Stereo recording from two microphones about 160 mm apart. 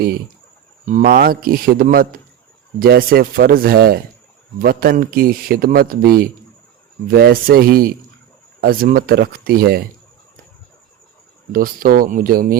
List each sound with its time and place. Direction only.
0.9 s a man's voice: 50° right (ahead or behind); by 9.8 s 70° right (ahead or behind)
11.5 s a man's voice: 60° right (ahead or behind)